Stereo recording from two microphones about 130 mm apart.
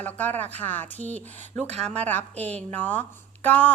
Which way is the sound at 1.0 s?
60° right (ahead or behind).